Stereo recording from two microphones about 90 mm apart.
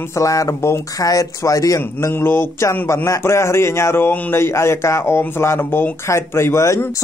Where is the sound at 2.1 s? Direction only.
25° left (ahead or behind).